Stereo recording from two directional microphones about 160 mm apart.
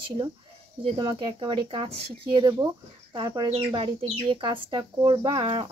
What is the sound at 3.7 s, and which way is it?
Speech, 30° right (ahead or behind).